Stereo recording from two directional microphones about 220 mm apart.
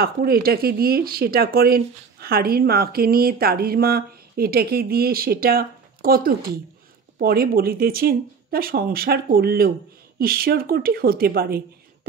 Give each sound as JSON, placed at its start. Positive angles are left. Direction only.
{"t": 0.0, "sound": "speech", "side_deg": -45}